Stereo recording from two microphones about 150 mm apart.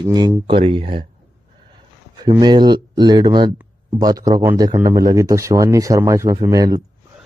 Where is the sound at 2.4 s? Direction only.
30° right (ahead or behind).